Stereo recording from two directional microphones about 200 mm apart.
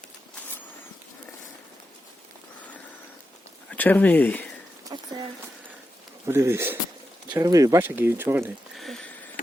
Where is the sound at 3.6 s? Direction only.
10° left (ahead or behind).